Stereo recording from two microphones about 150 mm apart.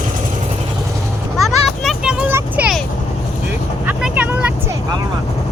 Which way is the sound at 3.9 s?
10° right (ahead or behind).